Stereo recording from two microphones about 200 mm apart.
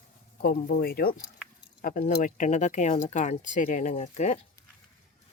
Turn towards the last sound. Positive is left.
turn(degrees=35)  # may be behind; listen again after turning